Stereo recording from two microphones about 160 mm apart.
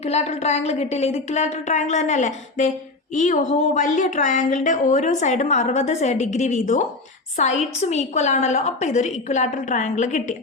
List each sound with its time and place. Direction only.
0.0 s a woman's voice: 45° left (ahead or behind)